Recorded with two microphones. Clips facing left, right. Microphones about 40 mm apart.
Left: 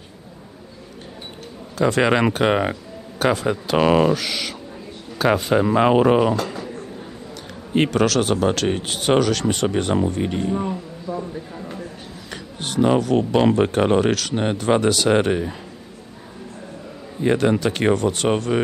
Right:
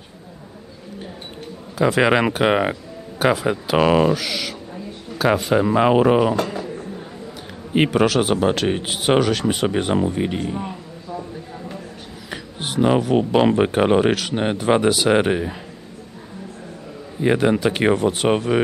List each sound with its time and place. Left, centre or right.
1.8 s speech: centre
7.7 s speech: centre
12.3 s speech: centre
17.2 s speech: centre